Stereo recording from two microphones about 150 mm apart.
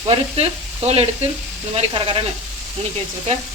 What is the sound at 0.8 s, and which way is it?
Speech, 45° right (ahead or behind).